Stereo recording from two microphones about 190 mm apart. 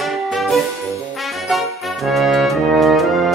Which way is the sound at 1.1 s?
Centre (ahead or behind).